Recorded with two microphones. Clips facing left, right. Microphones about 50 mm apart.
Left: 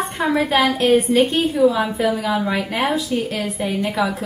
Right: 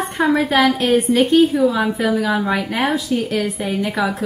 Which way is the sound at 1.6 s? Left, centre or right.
Centre.